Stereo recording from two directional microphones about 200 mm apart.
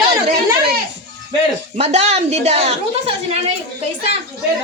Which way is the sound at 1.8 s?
30° right (ahead or behind).